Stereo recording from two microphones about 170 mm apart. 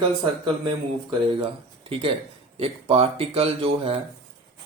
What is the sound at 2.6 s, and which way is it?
Speech, 35° right (ahead or behind).